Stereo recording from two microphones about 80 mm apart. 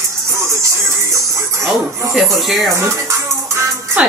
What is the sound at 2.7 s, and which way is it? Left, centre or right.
Music, right.